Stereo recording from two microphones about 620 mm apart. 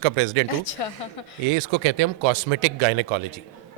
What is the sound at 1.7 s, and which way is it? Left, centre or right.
Speech, right.